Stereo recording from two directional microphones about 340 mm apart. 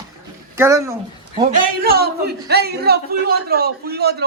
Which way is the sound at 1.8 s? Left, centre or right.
Right.